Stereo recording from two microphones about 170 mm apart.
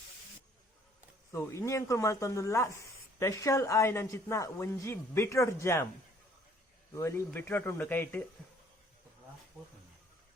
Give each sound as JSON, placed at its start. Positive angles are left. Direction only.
{"t": 1.3, "sound": "speech", "side_deg": 15}
{"t": 6.9, "sound": "speech", "side_deg": 15}